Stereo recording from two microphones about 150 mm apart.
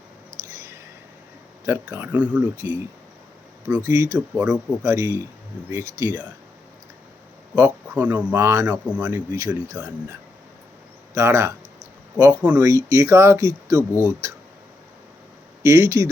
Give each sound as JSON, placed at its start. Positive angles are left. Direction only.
{"t": 1.6, "sound": "speech", "side_deg": -15}
{"t": 3.8, "sound": "speech", "side_deg": -20}
{"t": 7.5, "sound": "speech", "side_deg": -15}
{"t": 15.6, "sound": "speech", "side_deg": -20}